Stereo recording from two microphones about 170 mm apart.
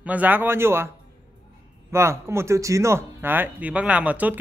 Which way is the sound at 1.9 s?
15° right (ahead or behind).